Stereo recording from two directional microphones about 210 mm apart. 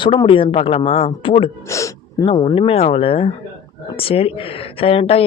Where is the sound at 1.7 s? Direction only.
15° left (ahead or behind).